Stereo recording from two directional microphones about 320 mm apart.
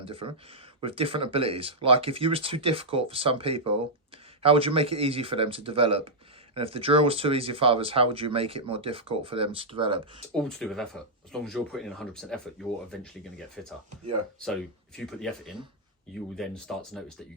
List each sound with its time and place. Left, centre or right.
0.0 s speech: centre
10.3 s speech: centre
13.6 s speech: centre
14.9 s speech: centre